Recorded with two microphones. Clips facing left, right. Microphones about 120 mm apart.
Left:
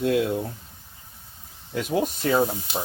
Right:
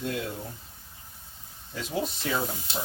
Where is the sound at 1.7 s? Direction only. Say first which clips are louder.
Left 7 dB; 55° left (ahead or behind).